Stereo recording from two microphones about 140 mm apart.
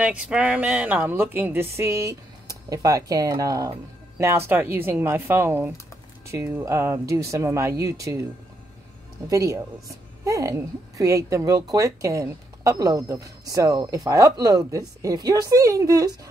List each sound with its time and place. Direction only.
0.0 s a woman's voice: 10° right (ahead or behind)
9.3 s speech: 25° right (ahead or behind)